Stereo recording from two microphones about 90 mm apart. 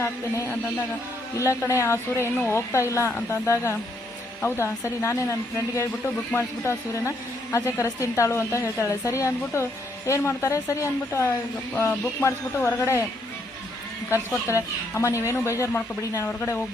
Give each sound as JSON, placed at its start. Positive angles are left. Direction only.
{"t": 0.0, "sound": "a woman's voice", "side_deg": 35}
{"t": 14.4, "sound": "a woman's voice", "side_deg": 35}